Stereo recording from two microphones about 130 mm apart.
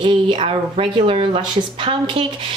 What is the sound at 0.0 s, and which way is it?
Speech, 40° right (ahead or behind).